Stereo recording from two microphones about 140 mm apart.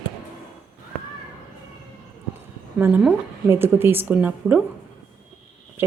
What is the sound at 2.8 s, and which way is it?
A woman's voice, 10° right (ahead or behind).